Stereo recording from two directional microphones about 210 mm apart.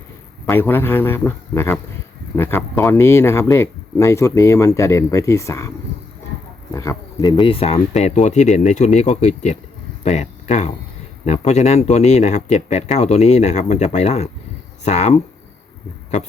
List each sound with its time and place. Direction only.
0.4 s speech: 10° left (ahead or behind); by 15.2 s 30° left (ahead or behind)